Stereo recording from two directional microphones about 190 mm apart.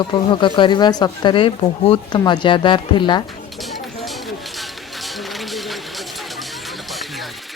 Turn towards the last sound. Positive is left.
turn(degrees=0)  # may be behind; listen again after turning